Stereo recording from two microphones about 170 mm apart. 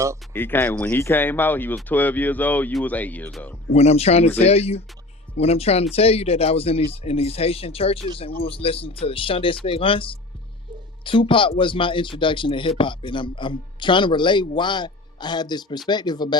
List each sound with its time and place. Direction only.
0.3 s speech: 10° left (ahead or behind)
3.7 s speech: 40° left (ahead or behind)